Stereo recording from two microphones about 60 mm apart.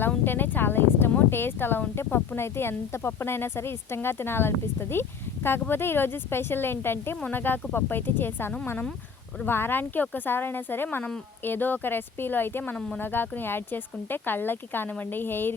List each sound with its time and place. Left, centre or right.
0.3 s speech: left